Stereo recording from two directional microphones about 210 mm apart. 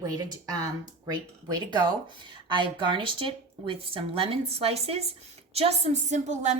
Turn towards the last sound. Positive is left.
turn(degrees=-35)  # may be behind; listen again after turning